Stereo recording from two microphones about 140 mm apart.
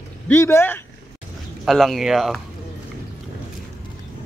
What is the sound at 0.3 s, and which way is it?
Speech, 20° left (ahead or behind).